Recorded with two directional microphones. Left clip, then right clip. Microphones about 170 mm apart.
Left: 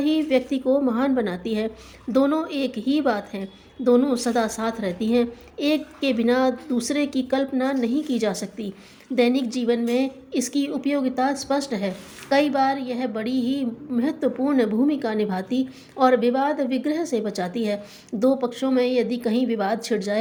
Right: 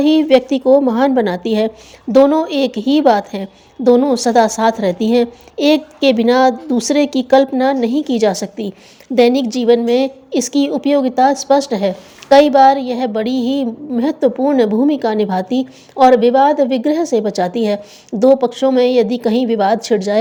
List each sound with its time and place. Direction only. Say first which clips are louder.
0.0 s a woman's voice: right 10 dB; 40° right (ahead or behind)